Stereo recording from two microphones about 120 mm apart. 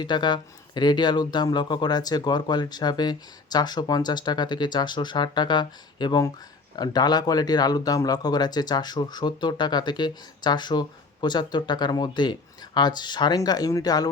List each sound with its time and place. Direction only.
0.0 s speech: 40° left (ahead or behind)